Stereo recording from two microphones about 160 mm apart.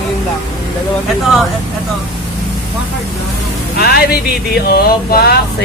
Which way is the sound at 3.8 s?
75° left (ahead or behind).